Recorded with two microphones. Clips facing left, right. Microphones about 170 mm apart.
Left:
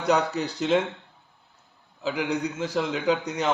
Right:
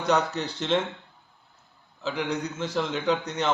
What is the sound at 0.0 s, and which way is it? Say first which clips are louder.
Speech: left 1 dB; 10° left (ahead or behind).